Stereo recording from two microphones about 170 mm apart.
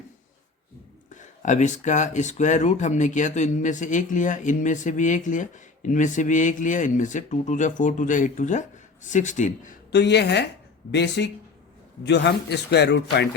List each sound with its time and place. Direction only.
1.1 s speech: 45° left (ahead or behind)
9.9 s a woman's voice: 85° left